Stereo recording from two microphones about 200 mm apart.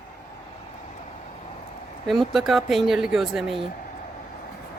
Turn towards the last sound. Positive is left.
turn(degrees=0)  # may be behind; listen again after turning